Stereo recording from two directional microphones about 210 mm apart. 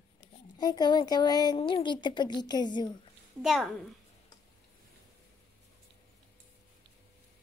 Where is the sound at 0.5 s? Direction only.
20° left (ahead or behind).